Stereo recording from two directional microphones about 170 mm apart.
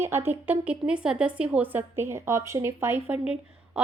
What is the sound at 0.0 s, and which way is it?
Speech, 15° right (ahead or behind).